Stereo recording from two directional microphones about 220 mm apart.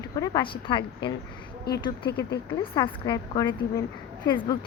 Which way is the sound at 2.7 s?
20° left (ahead or behind).